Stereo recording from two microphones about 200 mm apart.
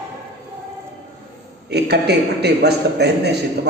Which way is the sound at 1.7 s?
55° right (ahead or behind).